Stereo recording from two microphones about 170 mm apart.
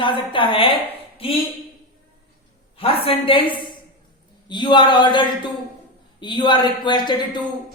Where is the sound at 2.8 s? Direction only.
35° left (ahead or behind).